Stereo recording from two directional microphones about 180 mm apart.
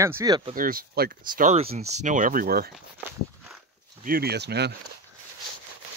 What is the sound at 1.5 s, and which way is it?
Speech, 35° right (ahead or behind).